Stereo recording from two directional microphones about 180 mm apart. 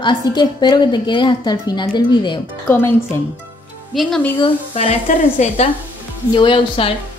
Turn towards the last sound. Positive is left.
turn(degrees=30)  # may be behind; listen again after turning